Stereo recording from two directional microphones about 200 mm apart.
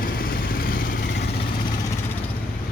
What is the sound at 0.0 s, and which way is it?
Vehicle, 45° left (ahead or behind).